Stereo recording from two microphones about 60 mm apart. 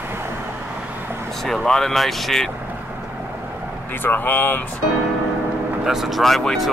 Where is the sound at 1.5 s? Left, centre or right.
Centre.